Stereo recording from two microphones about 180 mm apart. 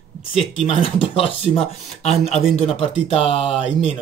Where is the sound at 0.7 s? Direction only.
30° left (ahead or behind).